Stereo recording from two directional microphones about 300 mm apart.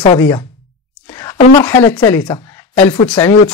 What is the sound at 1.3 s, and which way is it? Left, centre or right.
Speech, left.